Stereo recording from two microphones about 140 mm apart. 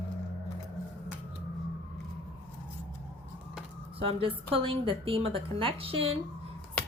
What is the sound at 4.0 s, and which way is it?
A woman's voice, 40° right (ahead or behind).